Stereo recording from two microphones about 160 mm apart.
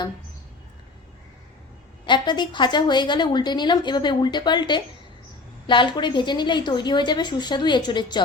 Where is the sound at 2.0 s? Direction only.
30° left (ahead or behind).